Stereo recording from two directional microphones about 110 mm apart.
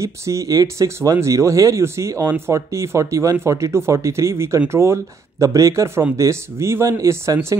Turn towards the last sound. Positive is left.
turn(degrees=-25)  # may be behind; listen again after turning